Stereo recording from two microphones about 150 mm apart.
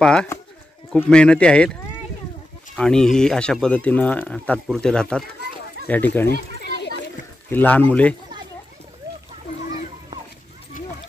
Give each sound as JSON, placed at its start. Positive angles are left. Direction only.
{"t": 0.0, "sound": "speech", "side_deg": 5}
{"t": 7.4, "sound": "speech", "side_deg": 10}